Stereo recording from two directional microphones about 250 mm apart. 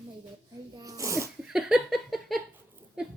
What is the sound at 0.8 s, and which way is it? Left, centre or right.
Sneeze, centre.